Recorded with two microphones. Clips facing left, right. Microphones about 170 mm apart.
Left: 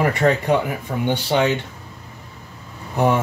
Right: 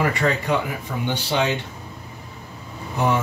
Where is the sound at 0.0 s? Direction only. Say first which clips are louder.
Left 4 dB; 55° left (ahead or behind).